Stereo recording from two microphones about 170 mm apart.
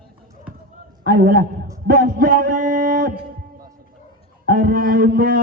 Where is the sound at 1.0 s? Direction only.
55° right (ahead or behind).